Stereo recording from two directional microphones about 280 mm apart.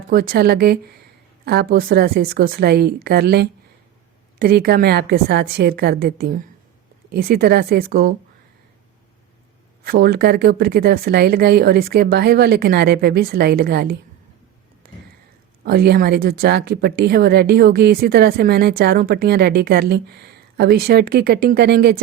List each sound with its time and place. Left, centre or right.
0.1 s speech: right
9.8 s speech: right
15.6 s speech: right